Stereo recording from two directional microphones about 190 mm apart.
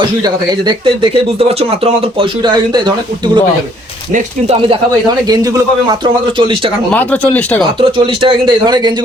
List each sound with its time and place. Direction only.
0.9 s speech: 30° right (ahead or behind)
4.1 s speech: 30° right (ahead or behind)
5.3 s speech: 20° right (ahead or behind)
6.9 s speech: 10° left (ahead or behind)
7.8 s speech: 25° right (ahead or behind)